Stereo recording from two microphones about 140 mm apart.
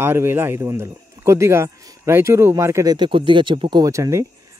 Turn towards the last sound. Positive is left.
turn(degrees=-25)  # may be behind; listen again after turning